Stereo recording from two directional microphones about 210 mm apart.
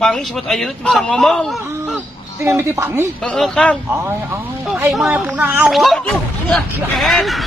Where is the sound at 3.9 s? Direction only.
10° right (ahead or behind).